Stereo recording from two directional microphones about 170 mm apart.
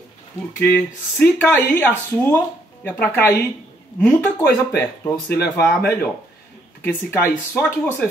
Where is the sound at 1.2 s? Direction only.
10° left (ahead or behind).